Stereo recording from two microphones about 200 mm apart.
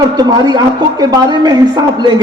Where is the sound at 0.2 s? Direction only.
20° right (ahead or behind).